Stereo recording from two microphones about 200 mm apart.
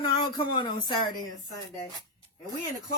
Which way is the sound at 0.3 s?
20° left (ahead or behind).